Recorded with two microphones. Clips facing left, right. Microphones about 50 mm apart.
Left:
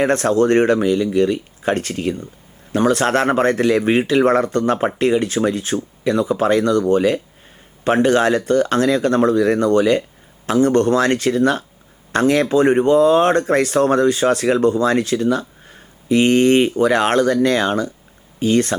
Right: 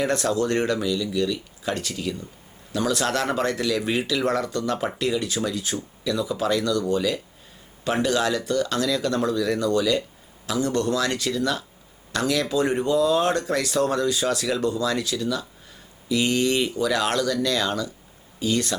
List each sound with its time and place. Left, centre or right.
0.0 s speech: left